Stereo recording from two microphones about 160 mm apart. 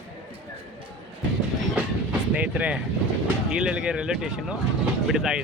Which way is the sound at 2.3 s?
10° right (ahead or behind).